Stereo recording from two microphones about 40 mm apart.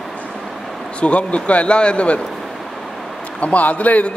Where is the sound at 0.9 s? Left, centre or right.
Left.